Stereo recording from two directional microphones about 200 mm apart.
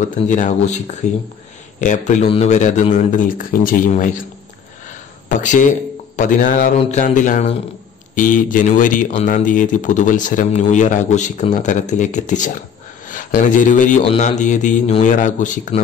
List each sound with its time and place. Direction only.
0.1 s speech: 40° left (ahead or behind)
5.3 s speech: 40° left (ahead or behind)